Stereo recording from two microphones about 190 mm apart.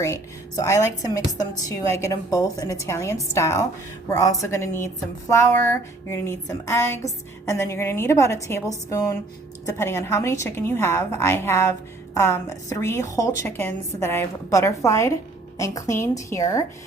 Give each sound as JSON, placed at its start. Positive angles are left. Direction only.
{"t": 0.0, "sound": "speech", "side_deg": 15}
{"t": 2.3, "sound": "speech", "side_deg": 15}